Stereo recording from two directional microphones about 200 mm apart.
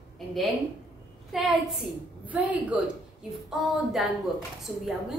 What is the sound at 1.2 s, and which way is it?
A woman's voice, centre (ahead or behind).